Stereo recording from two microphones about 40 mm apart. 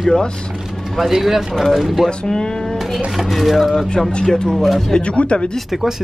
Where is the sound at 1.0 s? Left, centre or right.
Centre.